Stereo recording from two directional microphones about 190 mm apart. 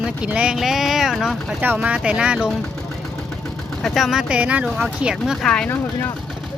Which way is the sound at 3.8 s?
Centre (ahead or behind).